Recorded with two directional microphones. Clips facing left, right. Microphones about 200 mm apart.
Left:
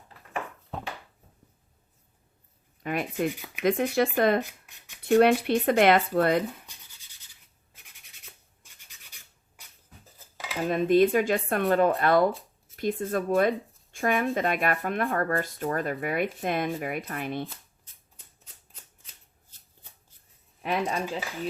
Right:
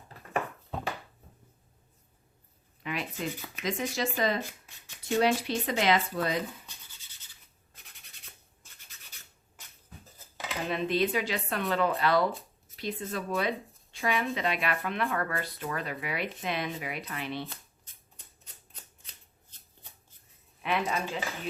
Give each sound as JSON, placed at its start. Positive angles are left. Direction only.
{"t": 2.8, "sound": "speech", "side_deg": 50}
{"t": 8.6, "sound": "rub", "side_deg": 15}
{"t": 10.7, "sound": "speech", "side_deg": 45}
{"t": 20.6, "sound": "speech", "side_deg": 40}